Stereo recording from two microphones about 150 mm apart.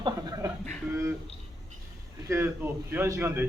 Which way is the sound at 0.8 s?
20° right (ahead or behind).